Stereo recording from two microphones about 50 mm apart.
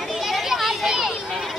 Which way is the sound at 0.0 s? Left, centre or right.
Centre.